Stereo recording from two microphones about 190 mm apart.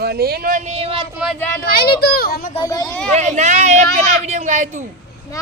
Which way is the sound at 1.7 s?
55° left (ahead or behind).